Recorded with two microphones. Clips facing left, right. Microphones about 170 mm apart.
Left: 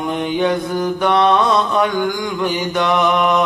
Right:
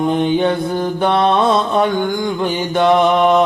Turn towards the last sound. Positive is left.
turn(degrees=-30)  # may be behind; listen again after turning